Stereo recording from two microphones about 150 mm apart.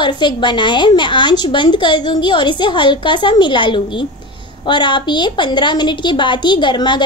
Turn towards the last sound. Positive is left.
turn(degrees=30)  # may be behind; listen again after turning